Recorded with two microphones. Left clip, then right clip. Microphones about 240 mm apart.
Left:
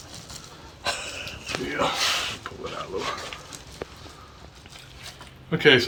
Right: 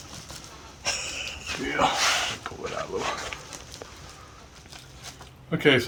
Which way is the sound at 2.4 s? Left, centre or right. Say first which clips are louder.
Right 1 dB; right.